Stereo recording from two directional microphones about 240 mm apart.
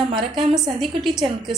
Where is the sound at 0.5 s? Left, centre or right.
Centre.